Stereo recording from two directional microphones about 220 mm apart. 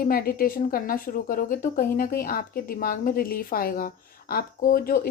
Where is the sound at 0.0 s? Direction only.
40° left (ahead or behind).